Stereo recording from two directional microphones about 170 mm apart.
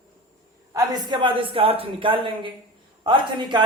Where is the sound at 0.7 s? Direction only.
25° right (ahead or behind).